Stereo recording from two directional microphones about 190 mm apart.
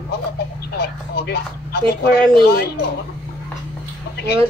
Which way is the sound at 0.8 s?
55° left (ahead or behind).